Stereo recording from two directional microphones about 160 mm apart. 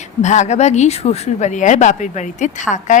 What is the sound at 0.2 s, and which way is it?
Speech, 45° left (ahead or behind).